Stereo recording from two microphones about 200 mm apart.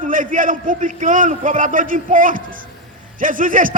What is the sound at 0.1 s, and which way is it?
A man's voice, 40° right (ahead or behind).